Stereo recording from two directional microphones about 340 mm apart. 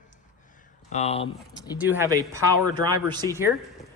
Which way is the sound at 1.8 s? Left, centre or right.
Centre.